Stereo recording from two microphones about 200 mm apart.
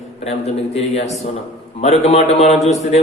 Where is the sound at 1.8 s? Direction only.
30° left (ahead or behind).